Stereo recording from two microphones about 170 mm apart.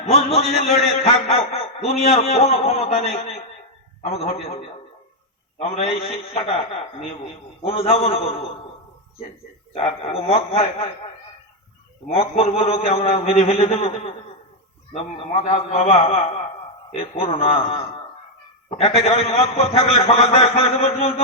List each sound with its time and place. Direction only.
0.0 s a man's voice: 40° left (ahead or behind)
5.5 s a man's voice: 35° left (ahead or behind)
9.7 s a man's voice: 35° left (ahead or behind)
12.0 s a man's voice: 35° left (ahead or behind)
15.4 s a man's voice: 40° left (ahead or behind)